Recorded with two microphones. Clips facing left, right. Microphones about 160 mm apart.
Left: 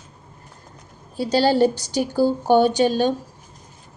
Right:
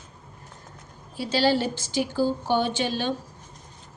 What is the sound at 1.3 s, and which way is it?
A woman's voice, 40° left (ahead or behind).